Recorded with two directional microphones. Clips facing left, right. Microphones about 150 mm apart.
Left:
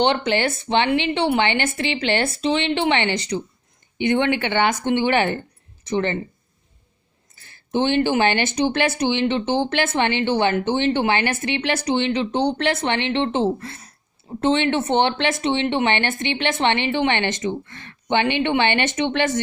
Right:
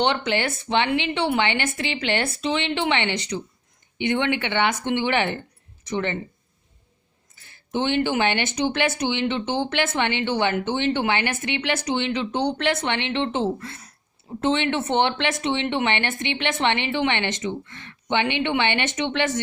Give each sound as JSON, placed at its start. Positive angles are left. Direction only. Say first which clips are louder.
{"t": 0.0, "sound": "speech", "louder": "left 3 dB", "side_deg": 30}
{"t": 7.7, "sound": "speech", "louder": "left 3 dB", "side_deg": 35}